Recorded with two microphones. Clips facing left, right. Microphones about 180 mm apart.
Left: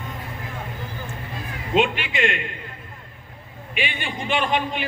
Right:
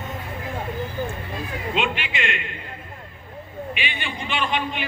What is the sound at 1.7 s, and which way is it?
Speech, 45° left (ahead or behind).